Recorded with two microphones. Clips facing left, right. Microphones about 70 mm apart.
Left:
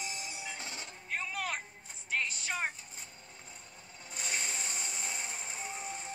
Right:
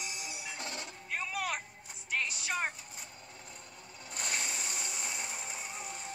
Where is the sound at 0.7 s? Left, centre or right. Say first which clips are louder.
Even; centre.